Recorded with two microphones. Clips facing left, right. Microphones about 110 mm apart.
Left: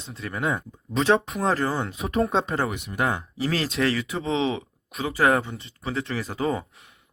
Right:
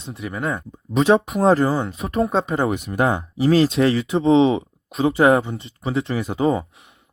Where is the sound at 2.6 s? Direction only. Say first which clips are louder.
Right 8 dB; 40° right (ahead or behind).